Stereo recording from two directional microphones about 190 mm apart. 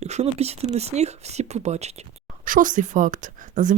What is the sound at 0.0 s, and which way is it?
Speech, 35° right (ahead or behind).